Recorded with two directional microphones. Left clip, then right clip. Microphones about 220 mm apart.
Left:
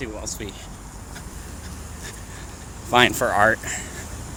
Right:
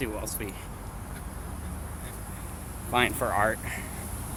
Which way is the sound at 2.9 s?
45° left (ahead or behind).